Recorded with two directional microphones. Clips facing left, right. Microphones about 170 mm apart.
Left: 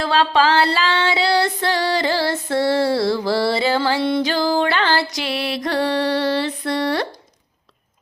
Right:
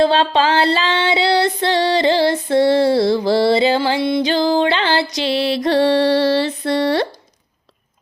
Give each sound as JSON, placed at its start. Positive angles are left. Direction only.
{"t": 0.0, "sound": "female singing", "side_deg": -25}